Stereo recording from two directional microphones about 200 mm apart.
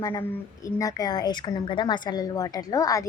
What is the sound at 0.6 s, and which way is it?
A woman's voice, 15° left (ahead or behind).